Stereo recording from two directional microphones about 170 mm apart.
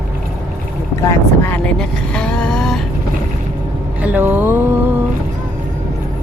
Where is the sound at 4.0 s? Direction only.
10° right (ahead or behind).